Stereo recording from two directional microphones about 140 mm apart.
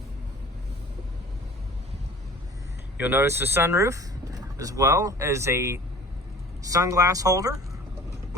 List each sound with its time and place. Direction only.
3.0 s speech: 15° right (ahead or behind)